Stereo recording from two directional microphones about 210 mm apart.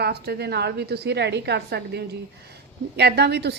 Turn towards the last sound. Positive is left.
turn(degrees=-50)  # may be behind; listen again after turning